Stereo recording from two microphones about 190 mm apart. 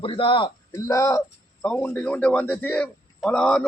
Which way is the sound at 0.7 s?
15° left (ahead or behind).